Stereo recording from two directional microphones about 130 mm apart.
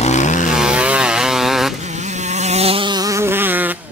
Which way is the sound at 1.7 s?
60° right (ahead or behind).